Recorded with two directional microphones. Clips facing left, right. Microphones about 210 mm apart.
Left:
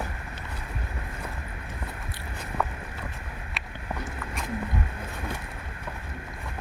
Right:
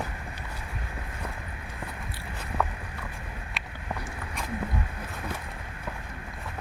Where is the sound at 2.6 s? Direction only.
Centre (ahead or behind).